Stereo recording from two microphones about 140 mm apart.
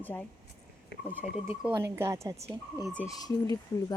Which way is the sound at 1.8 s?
20° right (ahead or behind).